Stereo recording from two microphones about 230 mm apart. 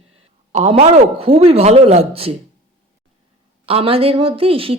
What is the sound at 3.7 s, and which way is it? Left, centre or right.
Speech, right.